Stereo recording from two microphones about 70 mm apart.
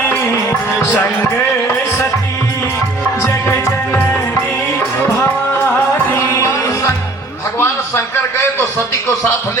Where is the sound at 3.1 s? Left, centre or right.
Left.